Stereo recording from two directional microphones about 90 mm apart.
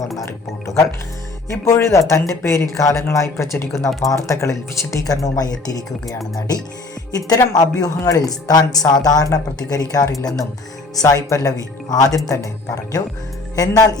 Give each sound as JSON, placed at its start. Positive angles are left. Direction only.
{"t": 1.5, "sound": "speech", "side_deg": 35}
{"t": 7.1, "sound": "speech", "side_deg": 45}